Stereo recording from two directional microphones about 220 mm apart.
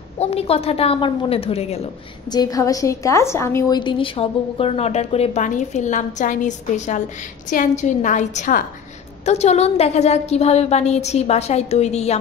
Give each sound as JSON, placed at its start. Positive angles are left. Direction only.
{"t": 0.2, "sound": "a woman's voice", "side_deg": 25}
{"t": 2.3, "sound": "a woman's voice", "side_deg": 15}